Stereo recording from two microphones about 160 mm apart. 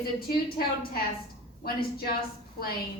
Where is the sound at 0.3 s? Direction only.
70° left (ahead or behind).